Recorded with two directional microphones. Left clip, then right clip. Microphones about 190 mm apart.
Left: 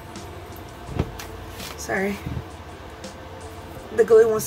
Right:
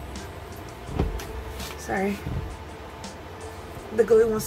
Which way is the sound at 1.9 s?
25° left (ahead or behind).